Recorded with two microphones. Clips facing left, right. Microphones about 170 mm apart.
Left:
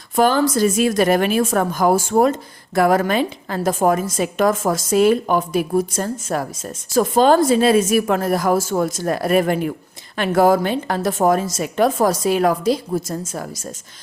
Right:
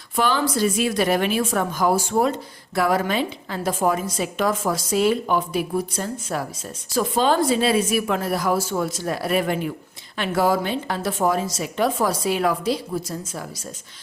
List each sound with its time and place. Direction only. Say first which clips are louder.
0.2 s a woman's voice: left 5 dB; 45° left (ahead or behind)